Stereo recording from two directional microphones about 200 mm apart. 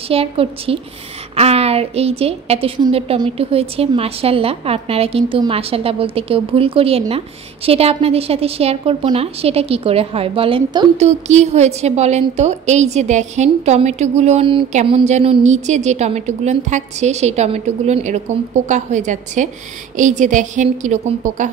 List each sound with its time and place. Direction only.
0.1 s a woman's voice: 30° right (ahead or behind)